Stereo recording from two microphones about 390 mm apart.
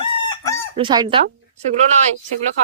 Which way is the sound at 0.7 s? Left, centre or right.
Centre.